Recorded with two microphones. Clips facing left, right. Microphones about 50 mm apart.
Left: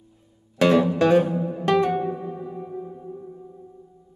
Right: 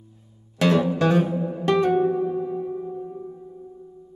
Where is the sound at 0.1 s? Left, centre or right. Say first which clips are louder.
Right 1 dB; centre.